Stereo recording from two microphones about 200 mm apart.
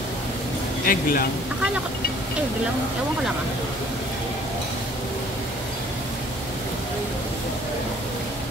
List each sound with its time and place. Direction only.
0.9 s speech: 45° left (ahead or behind)